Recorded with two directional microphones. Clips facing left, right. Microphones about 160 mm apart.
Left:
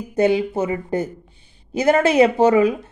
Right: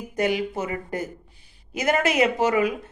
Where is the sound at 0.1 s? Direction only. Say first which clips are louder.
Left 7 dB; 30° left (ahead or behind).